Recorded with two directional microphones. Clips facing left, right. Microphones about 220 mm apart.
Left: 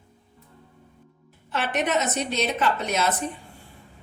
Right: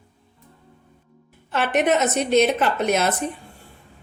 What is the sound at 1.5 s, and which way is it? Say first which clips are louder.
A woman's voice: right 6 dB; 55° right (ahead or behind).